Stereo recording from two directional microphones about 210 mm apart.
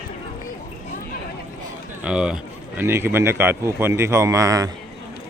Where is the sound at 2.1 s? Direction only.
5° right (ahead or behind).